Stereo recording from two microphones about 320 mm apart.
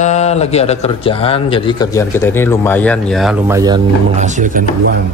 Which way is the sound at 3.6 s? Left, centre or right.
Centre.